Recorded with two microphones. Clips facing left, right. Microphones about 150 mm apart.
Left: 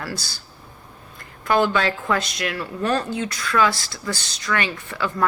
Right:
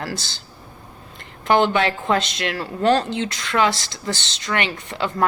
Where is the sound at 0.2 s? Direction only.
25° right (ahead or behind).